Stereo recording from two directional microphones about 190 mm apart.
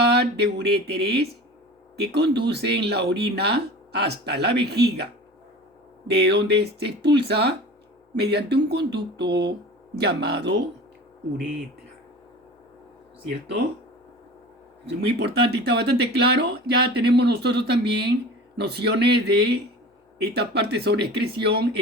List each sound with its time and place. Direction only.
0.2 s speech: 60° right (ahead or behind)
6.1 s speech: 60° right (ahead or behind)
14.8 s speech: 60° right (ahead or behind)